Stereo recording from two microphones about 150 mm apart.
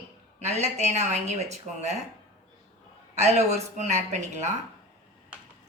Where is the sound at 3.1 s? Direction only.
50° right (ahead or behind).